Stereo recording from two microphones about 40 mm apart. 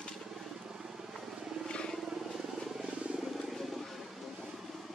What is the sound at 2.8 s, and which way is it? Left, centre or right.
Vehicle, right.